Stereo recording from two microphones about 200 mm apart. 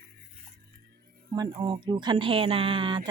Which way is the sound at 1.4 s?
20° right (ahead or behind).